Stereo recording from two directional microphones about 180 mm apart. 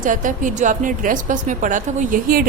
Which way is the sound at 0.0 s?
45° right (ahead or behind).